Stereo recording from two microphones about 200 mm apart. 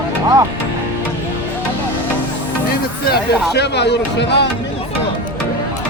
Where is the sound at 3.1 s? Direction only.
55° left (ahead or behind).